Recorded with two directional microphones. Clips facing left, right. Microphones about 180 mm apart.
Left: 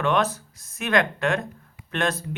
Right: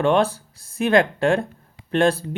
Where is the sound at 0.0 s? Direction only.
30° right (ahead or behind).